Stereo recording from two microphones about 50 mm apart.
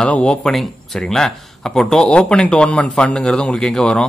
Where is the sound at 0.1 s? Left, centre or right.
Left.